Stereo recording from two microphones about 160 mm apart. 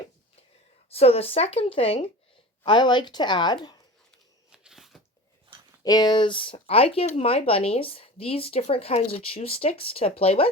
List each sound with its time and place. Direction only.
0.9 s speech: 40° left (ahead or behind)
4.5 s crunch: 5° right (ahead or behind)
5.8 s speech: 25° left (ahead or behind)